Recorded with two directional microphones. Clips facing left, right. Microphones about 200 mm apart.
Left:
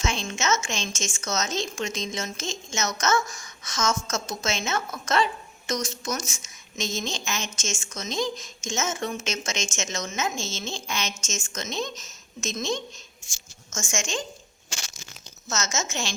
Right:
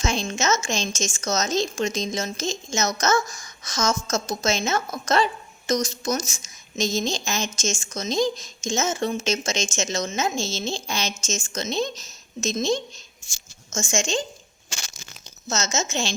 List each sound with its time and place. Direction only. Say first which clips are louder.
0.0 s speech: right 4 dB; 40° right (ahead or behind)
13.9 s speech: right 5 dB; 30° right (ahead or behind)
15.4 s a woman's voice: right 3 dB; 25° right (ahead or behind)